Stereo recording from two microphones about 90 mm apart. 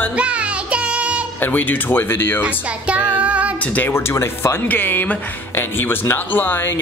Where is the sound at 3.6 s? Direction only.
15° left (ahead or behind).